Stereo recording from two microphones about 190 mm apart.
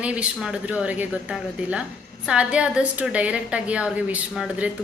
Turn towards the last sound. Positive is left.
turn(degrees=-5)  # may be behind; listen again after turning